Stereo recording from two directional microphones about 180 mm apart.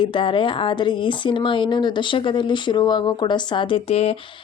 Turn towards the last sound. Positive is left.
turn(degrees=35)  # may be behind; listen again after turning